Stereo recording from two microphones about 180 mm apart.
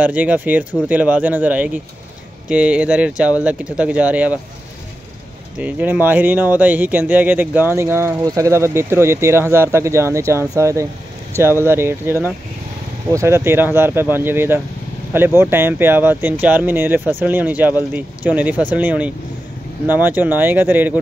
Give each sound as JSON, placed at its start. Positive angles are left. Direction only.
{"t": 0.0, "sound": "speech", "side_deg": -10}
{"t": 5.6, "sound": "speech", "side_deg": -10}